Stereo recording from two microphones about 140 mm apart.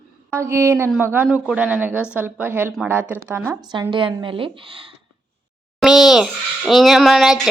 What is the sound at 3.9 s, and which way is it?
Speech, 35° right (ahead or behind).